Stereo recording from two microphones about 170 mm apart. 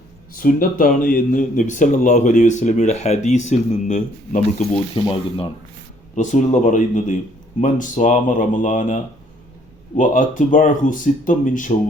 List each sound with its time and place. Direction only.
0.3 s speech: 55° left (ahead or behind)
4.9 s speech: 30° left (ahead or behind)
6.1 s speech: 45° left (ahead or behind)